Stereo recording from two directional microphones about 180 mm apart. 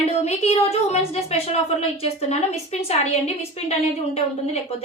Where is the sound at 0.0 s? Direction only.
35° left (ahead or behind).